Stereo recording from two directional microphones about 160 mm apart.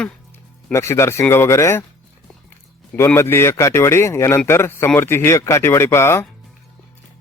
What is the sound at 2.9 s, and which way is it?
Speech, 15° left (ahead or behind).